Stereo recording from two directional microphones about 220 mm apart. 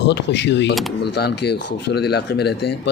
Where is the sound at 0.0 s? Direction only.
55° left (ahead or behind).